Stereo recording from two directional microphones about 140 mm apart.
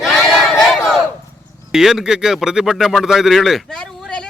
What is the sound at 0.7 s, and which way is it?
Battle cry, centre (ahead or behind).